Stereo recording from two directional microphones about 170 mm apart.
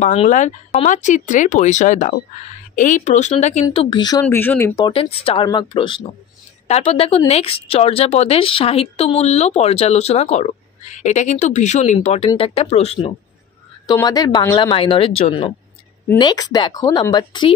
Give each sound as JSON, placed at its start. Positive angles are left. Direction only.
{"t": 0.0, "sound": "speech", "side_deg": 40}
{"t": 3.7, "sound": "speech", "side_deg": 30}
{"t": 4.4, "sound": "speech", "side_deg": 10}
{"t": 4.7, "sound": "speech", "side_deg": 30}
{"t": 14.0, "sound": "speech", "side_deg": 20}
{"t": 14.7, "sound": "speech", "side_deg": 35}
{"t": 16.2, "sound": "speech", "side_deg": 25}